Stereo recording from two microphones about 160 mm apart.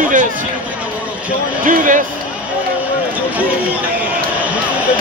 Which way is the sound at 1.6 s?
55° right (ahead or behind).